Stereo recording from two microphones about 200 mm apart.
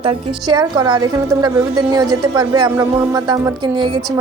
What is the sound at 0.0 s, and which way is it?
A woman's voice, 25° right (ahead or behind).